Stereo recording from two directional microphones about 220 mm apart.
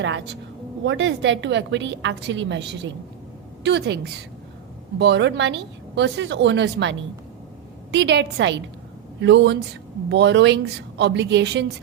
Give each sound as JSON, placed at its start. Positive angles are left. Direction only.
{"t": 0.0, "sound": "a woman's voice", "side_deg": -55}